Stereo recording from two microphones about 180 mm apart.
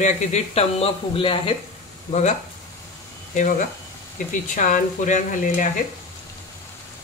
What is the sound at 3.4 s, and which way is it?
Speech, 45° left (ahead or behind).